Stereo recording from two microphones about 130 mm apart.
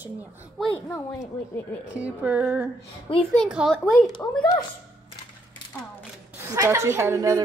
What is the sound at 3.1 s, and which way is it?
Speech, 45° left (ahead or behind).